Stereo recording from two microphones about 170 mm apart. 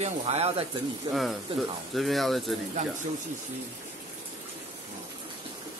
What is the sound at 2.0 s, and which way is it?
Speech, centre (ahead or behind).